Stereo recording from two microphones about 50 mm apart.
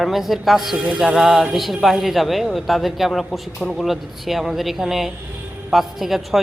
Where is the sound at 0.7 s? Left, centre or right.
Right.